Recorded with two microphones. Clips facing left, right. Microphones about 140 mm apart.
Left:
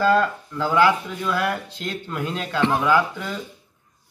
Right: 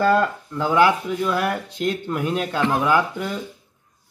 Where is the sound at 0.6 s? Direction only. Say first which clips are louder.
Right 1 dB; 15° right (ahead or behind).